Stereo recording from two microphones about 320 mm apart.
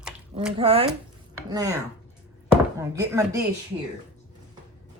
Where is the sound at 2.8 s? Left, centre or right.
Centre.